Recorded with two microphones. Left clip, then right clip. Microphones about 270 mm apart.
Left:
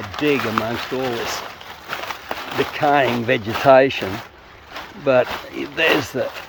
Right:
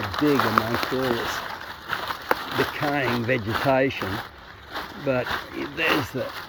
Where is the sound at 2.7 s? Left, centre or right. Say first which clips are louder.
Left 8 dB; centre.